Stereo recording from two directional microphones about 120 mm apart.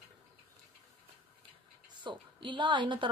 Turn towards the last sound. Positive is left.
turn(degrees=-40)  # may be behind; listen again after turning